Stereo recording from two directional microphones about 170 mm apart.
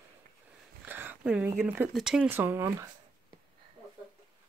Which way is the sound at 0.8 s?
10° right (ahead or behind).